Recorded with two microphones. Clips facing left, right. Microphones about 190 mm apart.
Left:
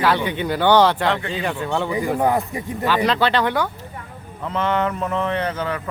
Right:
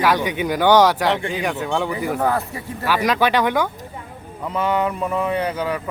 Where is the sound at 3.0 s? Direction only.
10° right (ahead or behind).